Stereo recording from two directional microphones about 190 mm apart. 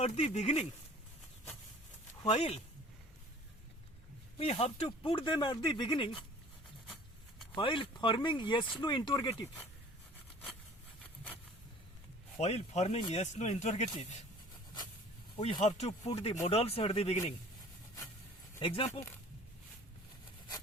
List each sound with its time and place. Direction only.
0.0 s speech: 35° left (ahead or behind)
2.2 s speech: 35° left (ahead or behind)
4.4 s speech: 30° left (ahead or behind)
7.5 s speech: 25° left (ahead or behind)
12.4 s speech: 35° left (ahead or behind)
13.2 s speech: 40° left (ahead or behind)
15.4 s speech: 30° left (ahead or behind)
18.9 s speech: 15° left (ahead or behind)